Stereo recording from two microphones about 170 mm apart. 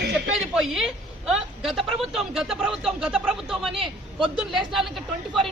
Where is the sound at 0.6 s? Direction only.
Centre (ahead or behind).